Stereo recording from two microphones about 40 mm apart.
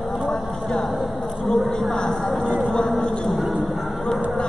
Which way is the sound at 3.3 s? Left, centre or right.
Centre.